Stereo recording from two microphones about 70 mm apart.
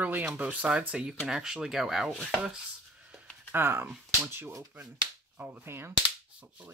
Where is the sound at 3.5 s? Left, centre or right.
Right.